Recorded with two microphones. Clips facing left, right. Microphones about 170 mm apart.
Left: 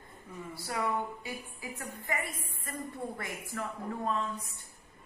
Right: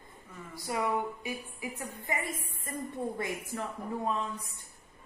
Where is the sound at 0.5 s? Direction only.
15° right (ahead or behind).